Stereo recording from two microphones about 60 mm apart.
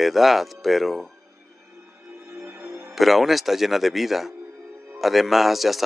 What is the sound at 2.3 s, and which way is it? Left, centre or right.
Music, right.